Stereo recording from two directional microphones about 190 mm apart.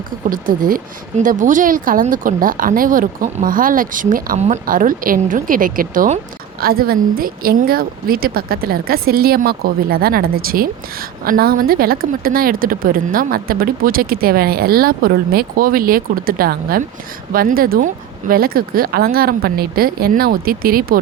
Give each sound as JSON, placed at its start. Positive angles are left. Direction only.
{"t": 0.3, "sound": "speech", "side_deg": -45}